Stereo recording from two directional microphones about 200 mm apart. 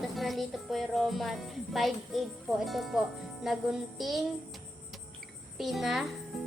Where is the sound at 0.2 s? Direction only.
Centre (ahead or behind).